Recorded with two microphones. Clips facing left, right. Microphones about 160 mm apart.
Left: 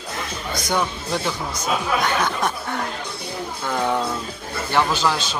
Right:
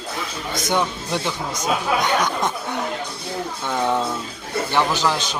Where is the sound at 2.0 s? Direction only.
20° right (ahead or behind).